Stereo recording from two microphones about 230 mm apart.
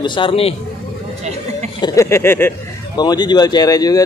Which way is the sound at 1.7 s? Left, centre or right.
Centre.